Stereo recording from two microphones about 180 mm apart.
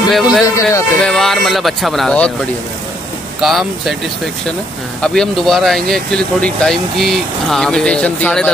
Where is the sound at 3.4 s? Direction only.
Centre (ahead or behind).